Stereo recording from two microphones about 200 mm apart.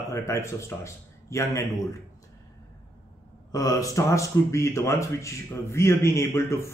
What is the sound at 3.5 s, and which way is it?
Speech, 15° left (ahead or behind).